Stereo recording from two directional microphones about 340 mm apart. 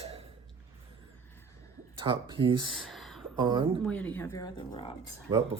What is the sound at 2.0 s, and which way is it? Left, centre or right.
Speech, centre.